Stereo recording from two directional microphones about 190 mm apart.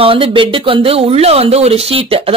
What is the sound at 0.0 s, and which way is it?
Speech, 30° right (ahead or behind).